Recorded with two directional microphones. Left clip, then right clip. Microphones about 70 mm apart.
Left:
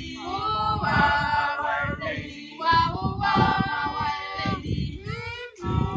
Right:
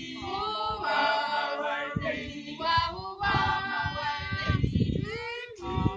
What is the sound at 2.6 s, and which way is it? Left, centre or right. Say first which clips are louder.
Child singing: left 6 dB; centre.